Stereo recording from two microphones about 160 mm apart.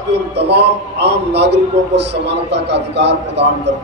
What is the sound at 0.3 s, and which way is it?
A man's voice, 90° right.